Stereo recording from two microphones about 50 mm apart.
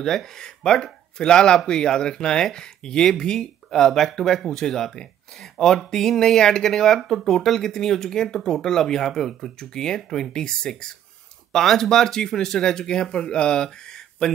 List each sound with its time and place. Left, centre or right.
0.0 s speech: centre